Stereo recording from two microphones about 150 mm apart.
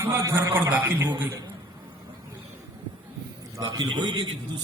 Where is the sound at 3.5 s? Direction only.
25° right (ahead or behind).